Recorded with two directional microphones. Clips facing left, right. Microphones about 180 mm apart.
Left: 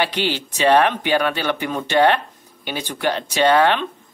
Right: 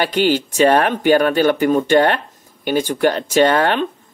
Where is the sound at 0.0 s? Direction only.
45° right (ahead or behind).